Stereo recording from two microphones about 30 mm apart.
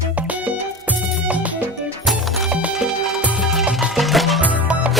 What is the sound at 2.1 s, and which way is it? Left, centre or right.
Music, centre.